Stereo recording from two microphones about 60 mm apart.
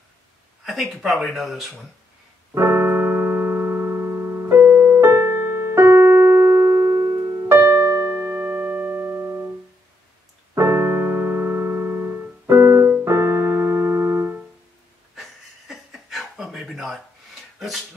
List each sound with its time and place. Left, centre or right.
0.7 s speech: centre
2.5 s keyboard: right
5.0 s keyboard: right
8.5 s music: right
10.5 s keyboard: right
15.7 s chuckle: centre
16.7 s a sound: centre
17.6 s dog: centre